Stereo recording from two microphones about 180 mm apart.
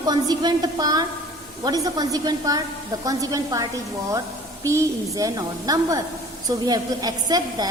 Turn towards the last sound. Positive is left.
turn(degrees=-20)  # may be behind; listen again after turning